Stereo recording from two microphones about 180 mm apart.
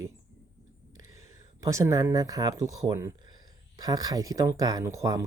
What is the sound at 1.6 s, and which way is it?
Speech, 15° right (ahead or behind).